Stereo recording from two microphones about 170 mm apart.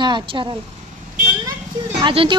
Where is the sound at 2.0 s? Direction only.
30° right (ahead or behind).